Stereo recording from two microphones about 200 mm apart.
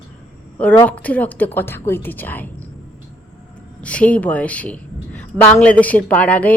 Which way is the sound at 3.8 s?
5° left (ahead or behind).